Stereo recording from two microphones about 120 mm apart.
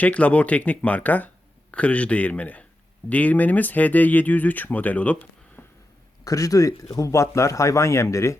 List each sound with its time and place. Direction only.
0.0 s speech: 10° left (ahead or behind)
5.6 s a sound: 20° left (ahead or behind)
6.2 s speech: 30° left (ahead or behind)